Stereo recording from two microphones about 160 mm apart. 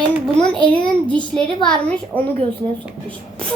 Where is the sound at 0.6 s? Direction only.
5° left (ahead or behind).